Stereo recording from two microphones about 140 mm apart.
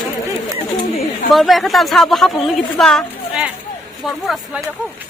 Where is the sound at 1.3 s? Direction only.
Centre (ahead or behind).